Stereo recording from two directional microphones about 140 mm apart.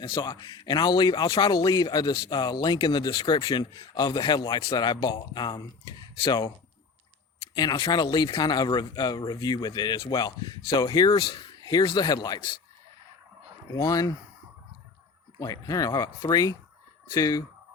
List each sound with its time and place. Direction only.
0.0 s a man's voice: 30° left (ahead or behind)
7.5 s speech: 30° left (ahead or behind)
13.7 s speech: 25° left (ahead or behind)
15.4 s speech: 25° left (ahead or behind)